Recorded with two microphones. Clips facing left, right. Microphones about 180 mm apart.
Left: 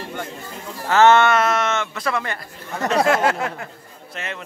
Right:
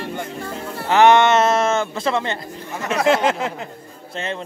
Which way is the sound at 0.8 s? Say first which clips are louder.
Right 1 dB; 15° right (ahead or behind).